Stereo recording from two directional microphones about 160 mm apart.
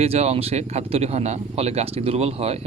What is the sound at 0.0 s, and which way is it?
Speech, 40° right (ahead or behind).